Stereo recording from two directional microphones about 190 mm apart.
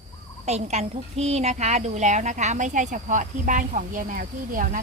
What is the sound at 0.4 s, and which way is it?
A woman's voice, 35° right (ahead or behind).